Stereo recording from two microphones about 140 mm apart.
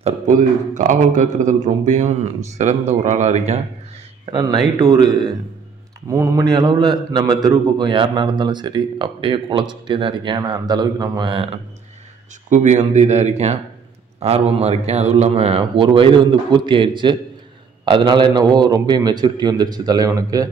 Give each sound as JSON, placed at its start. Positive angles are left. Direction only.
{"t": 0.3, "sound": "a man's voice", "side_deg": -70}
{"t": 4.3, "sound": "a man's voice", "side_deg": -30}
{"t": 12.4, "sound": "a man's voice", "side_deg": -60}